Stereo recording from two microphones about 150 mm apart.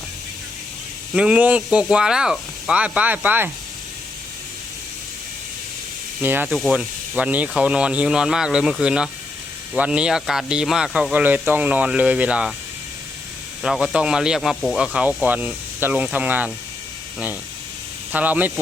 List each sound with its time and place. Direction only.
1.1 s speech: 5° right (ahead or behind)
6.2 s speech: 10° right (ahead or behind)
13.6 s speech: centre (ahead or behind)
18.1 s speech: 10° right (ahead or behind)